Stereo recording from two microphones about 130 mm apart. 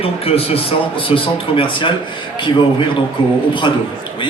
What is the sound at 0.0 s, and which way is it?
A man's voice, 50° left (ahead or behind).